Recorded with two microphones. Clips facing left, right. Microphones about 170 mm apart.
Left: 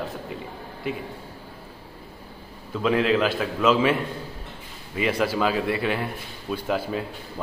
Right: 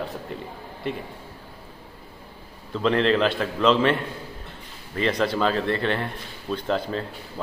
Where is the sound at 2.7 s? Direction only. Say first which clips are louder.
Even; 5° left (ahead or behind).